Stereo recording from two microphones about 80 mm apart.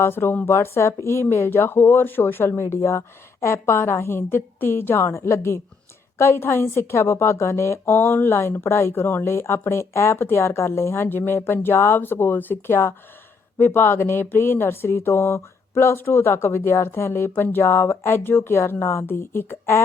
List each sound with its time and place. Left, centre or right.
0.0 s a woman's voice: left